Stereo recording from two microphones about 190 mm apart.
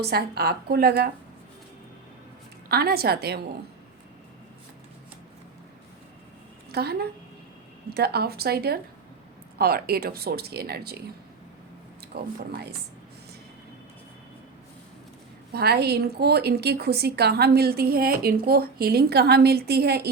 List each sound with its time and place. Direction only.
0.0 s a woman's voice: 55° right (ahead or behind)
2.6 s a woman's voice: 55° right (ahead or behind)
6.7 s a woman's voice: 55° right (ahead or behind)
12.1 s a woman's voice: 55° right (ahead or behind)
15.5 s a woman's voice: 55° right (ahead or behind)